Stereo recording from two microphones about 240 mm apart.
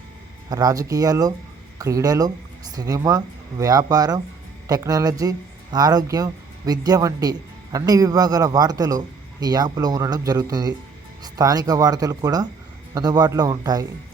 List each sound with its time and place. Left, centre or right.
0.5 s speech: centre